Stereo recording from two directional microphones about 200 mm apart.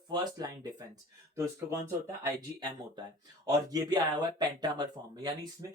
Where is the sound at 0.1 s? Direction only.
20° right (ahead or behind).